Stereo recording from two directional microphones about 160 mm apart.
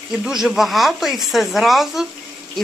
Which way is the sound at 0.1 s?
5° right (ahead or behind).